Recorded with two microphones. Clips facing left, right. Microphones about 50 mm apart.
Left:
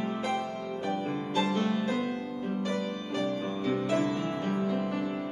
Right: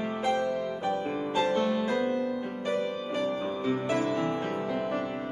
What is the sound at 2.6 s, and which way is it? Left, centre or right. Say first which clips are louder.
Music: right 3 dB; centre.